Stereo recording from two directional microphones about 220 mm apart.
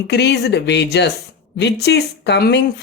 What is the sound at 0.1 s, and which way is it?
Speech, 50° left (ahead or behind).